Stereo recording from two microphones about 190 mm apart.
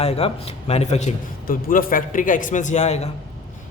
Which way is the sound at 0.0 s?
30° left (ahead or behind).